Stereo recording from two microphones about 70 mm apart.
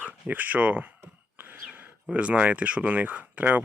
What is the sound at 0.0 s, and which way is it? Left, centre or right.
Speech, right.